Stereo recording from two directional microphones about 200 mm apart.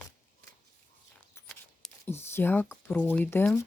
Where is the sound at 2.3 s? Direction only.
10° left (ahead or behind).